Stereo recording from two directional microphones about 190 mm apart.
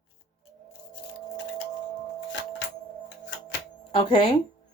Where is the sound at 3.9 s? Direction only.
25° left (ahead or behind).